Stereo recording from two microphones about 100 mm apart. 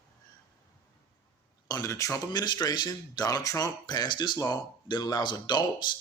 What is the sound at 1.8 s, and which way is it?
A man's voice, 30° left (ahead or behind).